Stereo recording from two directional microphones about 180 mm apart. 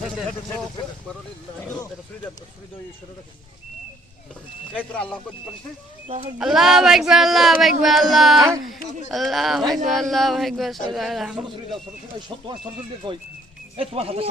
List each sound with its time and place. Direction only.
0.1 s speech: 5° left (ahead or behind)
4.8 s speech: 5° left (ahead or behind)
6.4 s speech: centre (ahead or behind)
13.0 s speech: 25° right (ahead or behind)